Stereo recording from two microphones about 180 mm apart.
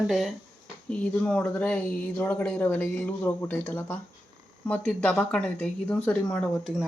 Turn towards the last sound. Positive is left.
turn(degrees=5)  # may be behind; listen again after turning